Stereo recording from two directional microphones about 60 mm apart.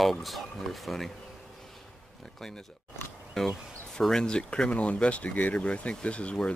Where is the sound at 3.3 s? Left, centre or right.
Centre.